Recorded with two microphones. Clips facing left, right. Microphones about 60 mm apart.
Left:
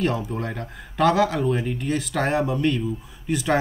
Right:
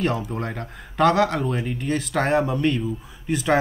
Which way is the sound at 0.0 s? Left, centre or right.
Centre.